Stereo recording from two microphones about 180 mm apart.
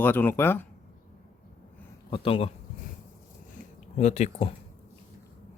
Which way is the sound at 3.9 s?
40° left (ahead or behind).